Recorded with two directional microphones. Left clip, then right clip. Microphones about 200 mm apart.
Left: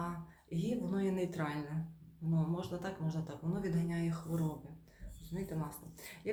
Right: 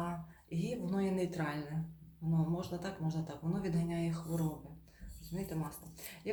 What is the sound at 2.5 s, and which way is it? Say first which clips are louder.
Speech: even; 20° left (ahead or behind).